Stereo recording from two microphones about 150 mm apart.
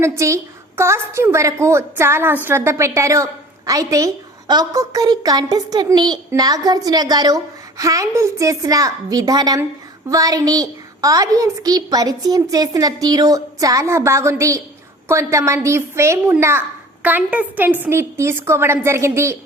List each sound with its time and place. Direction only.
0.0 s a woman's voice: 20° right (ahead or behind)